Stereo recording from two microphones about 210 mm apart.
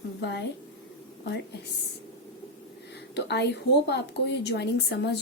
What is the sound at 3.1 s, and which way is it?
Speech, 55° left (ahead or behind).